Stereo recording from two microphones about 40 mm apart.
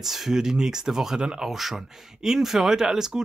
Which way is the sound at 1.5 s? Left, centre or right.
Centre.